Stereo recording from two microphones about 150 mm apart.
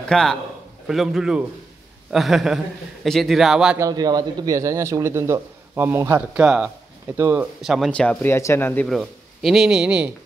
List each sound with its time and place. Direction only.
0.1 s a man's voice: 5° left (ahead or behind)
3.7 s a man's voice: 25° right (ahead or behind)
6.4 s speech: 5° right (ahead or behind)
7.6 s a man's voice: 5° right (ahead or behind)
7.9 s speech: 10° left (ahead or behind)
8.8 s a man's voice: centre (ahead or behind)